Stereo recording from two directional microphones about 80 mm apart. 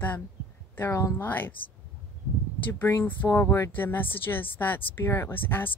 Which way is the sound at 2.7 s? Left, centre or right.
Left.